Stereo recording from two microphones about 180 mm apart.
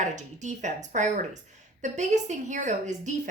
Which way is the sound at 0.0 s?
40° right (ahead or behind).